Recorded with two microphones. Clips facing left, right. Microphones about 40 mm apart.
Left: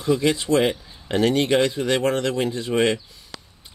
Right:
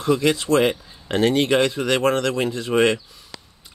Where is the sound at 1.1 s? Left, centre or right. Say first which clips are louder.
Right 1 dB; right.